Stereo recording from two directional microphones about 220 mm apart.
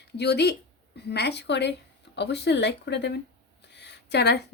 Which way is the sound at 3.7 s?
50° left (ahead or behind).